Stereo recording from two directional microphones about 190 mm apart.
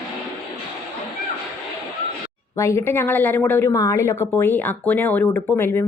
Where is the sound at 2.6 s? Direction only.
15° left (ahead or behind).